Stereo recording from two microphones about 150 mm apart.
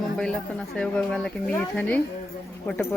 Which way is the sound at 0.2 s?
5° left (ahead or behind).